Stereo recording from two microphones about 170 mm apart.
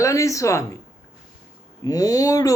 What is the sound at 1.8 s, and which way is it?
Speech, 20° left (ahead or behind).